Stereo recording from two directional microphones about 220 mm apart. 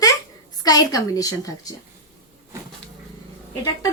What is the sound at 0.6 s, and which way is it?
A woman's voice, 15° left (ahead or behind).